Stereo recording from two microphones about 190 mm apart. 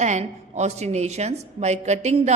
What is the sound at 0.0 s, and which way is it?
A woman's voice, 35° right (ahead or behind).